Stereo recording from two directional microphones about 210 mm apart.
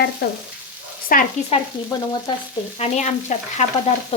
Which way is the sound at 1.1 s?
45° left (ahead or behind).